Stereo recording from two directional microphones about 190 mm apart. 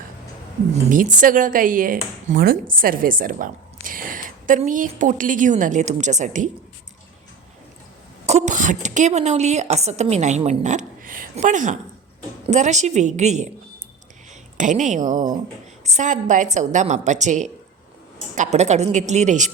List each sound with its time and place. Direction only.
0.9 s speech: 45° right (ahead or behind)
8.3 s a woman's voice: 40° right (ahead or behind)
14.6 s a woman's voice: 40° right (ahead or behind)